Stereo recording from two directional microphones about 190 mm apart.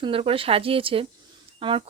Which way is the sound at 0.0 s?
30° right (ahead or behind).